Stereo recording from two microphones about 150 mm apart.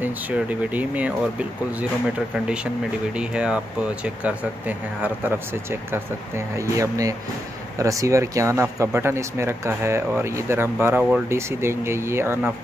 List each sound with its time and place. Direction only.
0.0 s speech: 10° right (ahead or behind)
2.3 s speech: 5° right (ahead or behind)